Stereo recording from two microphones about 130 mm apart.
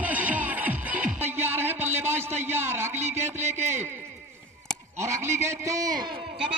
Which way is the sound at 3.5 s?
20° right (ahead or behind).